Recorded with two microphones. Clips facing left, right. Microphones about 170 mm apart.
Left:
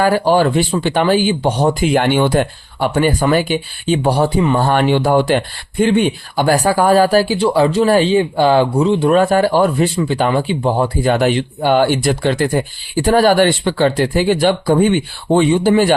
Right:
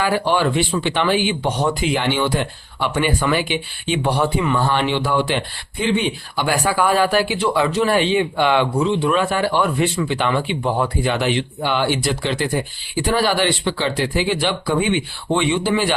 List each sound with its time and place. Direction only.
0.0 s speech: 40° left (ahead or behind)
1.8 s speech: 50° left (ahead or behind); by 4.6 s 35° left (ahead or behind)
4.7 s speech: 45° left (ahead or behind); by 10.9 s 30° left (ahead or behind)
11.0 s speech: 45° left (ahead or behind)